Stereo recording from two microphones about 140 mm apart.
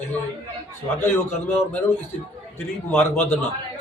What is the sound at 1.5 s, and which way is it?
A man's voice, 15° left (ahead or behind).